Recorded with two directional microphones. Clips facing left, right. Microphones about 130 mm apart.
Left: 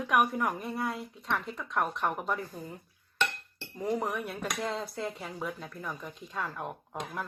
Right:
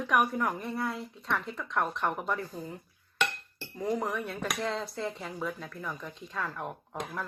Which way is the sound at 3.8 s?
15° left (ahead or behind).